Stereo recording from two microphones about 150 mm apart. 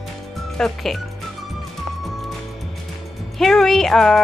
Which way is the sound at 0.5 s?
Centre (ahead or behind).